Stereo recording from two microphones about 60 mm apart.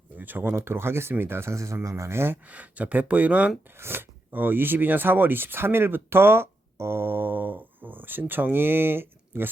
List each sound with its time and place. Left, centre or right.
0.2 s speech: right
2.5 s speech: right
3.8 s speech: right